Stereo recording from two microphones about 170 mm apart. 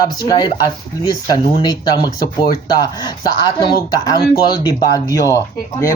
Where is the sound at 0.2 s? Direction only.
25° left (ahead or behind).